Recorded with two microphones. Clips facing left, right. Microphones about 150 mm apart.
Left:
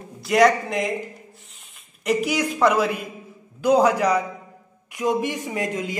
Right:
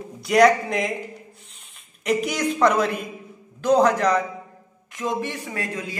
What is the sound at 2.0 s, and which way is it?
A woman's voice, 5° left (ahead or behind).